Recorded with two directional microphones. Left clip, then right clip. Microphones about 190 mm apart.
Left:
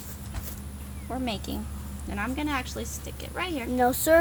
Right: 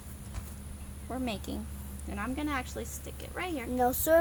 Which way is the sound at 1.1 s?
25° right (ahead or behind).